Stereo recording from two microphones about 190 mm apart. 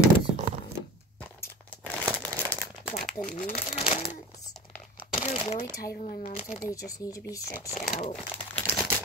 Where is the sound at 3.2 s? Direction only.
45° left (ahead or behind).